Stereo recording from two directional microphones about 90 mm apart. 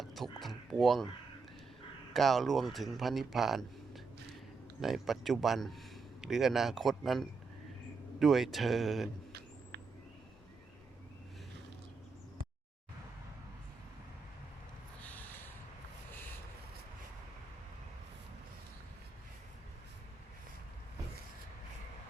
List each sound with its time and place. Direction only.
0.0 s speech: centre (ahead or behind)
2.1 s a man's voice: centre (ahead or behind)
15.0 s a sound: 20° left (ahead or behind)